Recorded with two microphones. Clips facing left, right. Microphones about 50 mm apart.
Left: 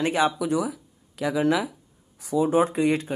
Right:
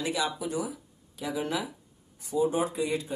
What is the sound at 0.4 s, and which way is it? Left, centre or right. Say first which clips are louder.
Speech: left 7 dB; left.